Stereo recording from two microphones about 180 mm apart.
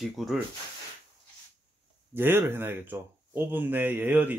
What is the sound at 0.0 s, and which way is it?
Speech, centre (ahead or behind).